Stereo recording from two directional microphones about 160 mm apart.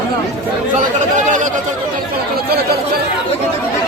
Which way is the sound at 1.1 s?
50° right (ahead or behind).